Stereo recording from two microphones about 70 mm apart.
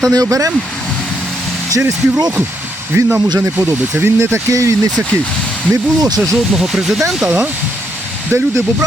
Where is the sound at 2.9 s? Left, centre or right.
Right.